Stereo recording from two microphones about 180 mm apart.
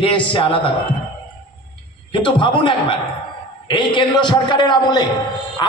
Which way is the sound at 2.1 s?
25° left (ahead or behind).